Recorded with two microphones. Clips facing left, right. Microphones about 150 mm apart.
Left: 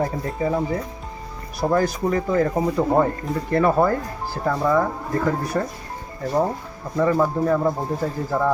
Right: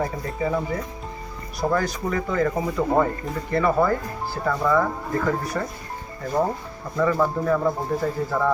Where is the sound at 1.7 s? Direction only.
35° left (ahead or behind).